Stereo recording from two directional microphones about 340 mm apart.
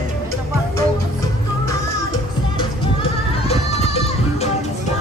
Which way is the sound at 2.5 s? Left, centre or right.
Centre.